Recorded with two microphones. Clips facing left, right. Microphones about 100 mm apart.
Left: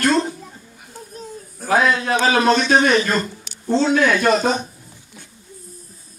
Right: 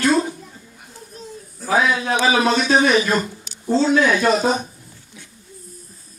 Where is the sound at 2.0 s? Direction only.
55° left (ahead or behind).